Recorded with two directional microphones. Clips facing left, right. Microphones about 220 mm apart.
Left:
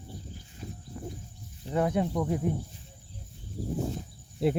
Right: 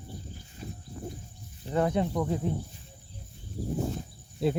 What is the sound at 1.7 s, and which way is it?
Speech, 5° left (ahead or behind).